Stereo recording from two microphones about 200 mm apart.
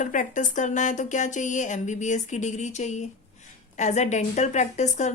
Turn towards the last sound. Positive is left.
turn(degrees=35)  # may be behind; listen again after turning